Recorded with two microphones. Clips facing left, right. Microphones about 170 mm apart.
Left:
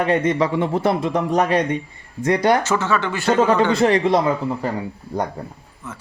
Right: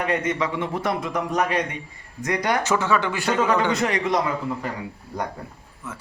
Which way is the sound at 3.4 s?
30° left (ahead or behind).